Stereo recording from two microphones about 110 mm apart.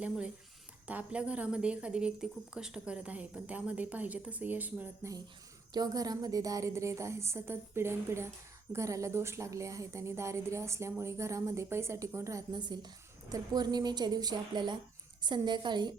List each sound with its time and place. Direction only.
0.9 s a woman's voice: 10° right (ahead or behind)
5.7 s a woman's voice: 35° right (ahead or behind)
12.5 s a woman's voice: 40° right (ahead or behind)